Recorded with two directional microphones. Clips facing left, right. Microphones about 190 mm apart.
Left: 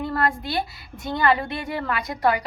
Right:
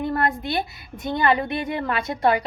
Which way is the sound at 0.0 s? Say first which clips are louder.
Right 1 dB; 20° right (ahead or behind).